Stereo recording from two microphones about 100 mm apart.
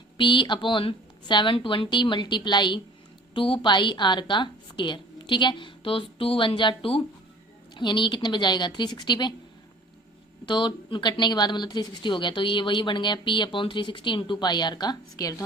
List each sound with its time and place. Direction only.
0.2 s a woman's voice: 55° left (ahead or behind)
3.3 s a woman's voice: 60° left (ahead or behind)
10.4 s a woman's voice: 50° left (ahead or behind); by 15.4 s 35° left (ahead or behind)